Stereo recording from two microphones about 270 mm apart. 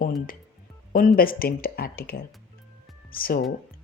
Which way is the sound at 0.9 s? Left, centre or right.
Left.